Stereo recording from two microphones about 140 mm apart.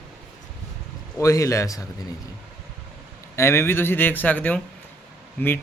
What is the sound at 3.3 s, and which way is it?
Speech, 20° left (ahead or behind).